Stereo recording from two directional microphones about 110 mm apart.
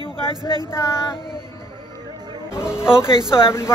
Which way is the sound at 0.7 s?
25° left (ahead or behind).